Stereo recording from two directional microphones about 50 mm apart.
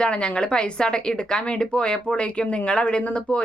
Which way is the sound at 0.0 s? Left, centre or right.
Left.